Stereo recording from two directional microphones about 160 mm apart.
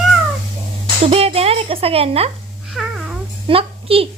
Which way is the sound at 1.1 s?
40° right (ahead or behind).